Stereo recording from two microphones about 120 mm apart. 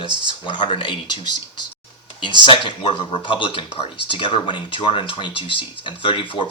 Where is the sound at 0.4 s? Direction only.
40° left (ahead or behind).